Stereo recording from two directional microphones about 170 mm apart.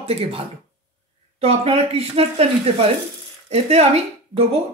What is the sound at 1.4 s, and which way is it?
Speech, 35° right (ahead or behind).